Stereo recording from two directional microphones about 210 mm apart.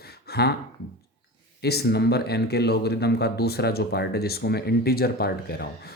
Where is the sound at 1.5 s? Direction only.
50° left (ahead or behind).